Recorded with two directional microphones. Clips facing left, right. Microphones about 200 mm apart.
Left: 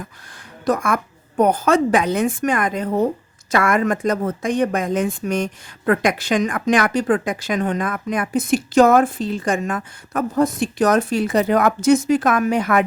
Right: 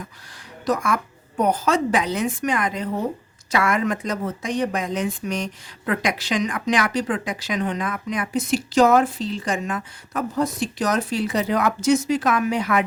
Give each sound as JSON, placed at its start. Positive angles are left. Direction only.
{"t": 0.6, "sound": "speech", "side_deg": 50}